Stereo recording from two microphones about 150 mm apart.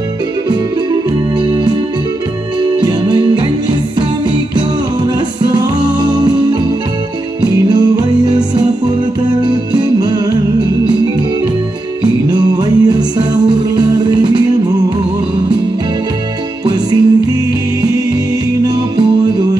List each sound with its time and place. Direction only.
0.5 s music: 30° right (ahead or behind)
2.8 s music: 30° right (ahead or behind)
4.6 s music: 30° right (ahead or behind)
7.4 s music: 30° right (ahead or behind)
12.0 s music: 25° right (ahead or behind)
16.6 s music: 25° right (ahead or behind)